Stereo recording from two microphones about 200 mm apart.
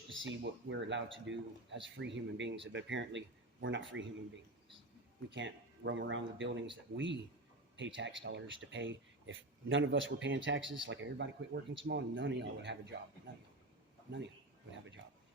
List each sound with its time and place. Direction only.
0.1 s speech: 70° right (ahead or behind)
5.3 s speech: 65° right (ahead or behind)